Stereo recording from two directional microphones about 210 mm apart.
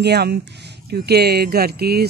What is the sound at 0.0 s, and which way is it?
Speech, 50° right (ahead or behind).